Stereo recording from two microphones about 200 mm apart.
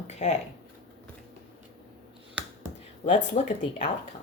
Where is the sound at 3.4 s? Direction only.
35° left (ahead or behind).